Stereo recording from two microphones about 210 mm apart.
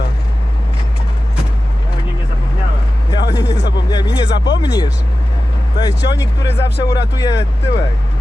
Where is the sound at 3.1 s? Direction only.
15° left (ahead or behind).